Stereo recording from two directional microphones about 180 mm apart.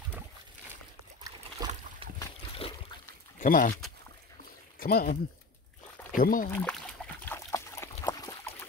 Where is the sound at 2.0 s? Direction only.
30° right (ahead or behind).